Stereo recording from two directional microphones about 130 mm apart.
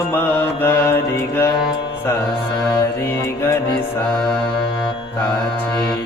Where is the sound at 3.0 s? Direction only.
20° left (ahead or behind).